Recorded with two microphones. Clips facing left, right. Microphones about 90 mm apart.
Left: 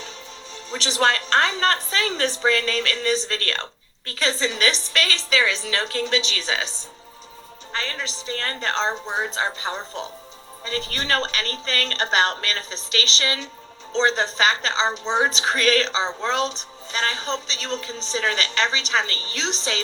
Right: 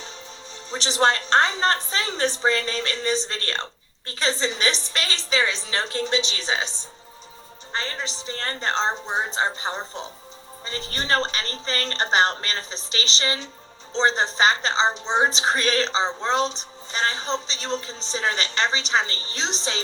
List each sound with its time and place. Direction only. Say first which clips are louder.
0.7 s a woman's voice: even; 30° right (ahead or behind)
7.7 s a woman's voice: even; 30° right (ahead or behind)